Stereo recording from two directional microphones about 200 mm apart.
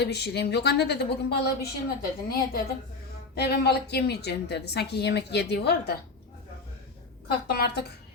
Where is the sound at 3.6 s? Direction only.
55° left (ahead or behind).